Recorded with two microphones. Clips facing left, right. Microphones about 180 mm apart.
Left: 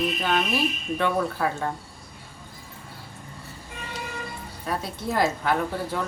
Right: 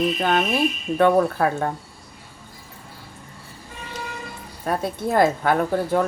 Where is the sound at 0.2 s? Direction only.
50° right (ahead or behind).